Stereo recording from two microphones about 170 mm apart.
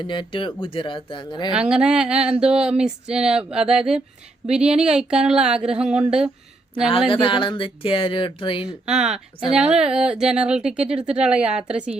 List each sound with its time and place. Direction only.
0.0 s speech: 30° left (ahead or behind)
1.5 s speech: 5° right (ahead or behind)
7.1 s speech: 30° left (ahead or behind)
8.9 s speech: 5° right (ahead or behind)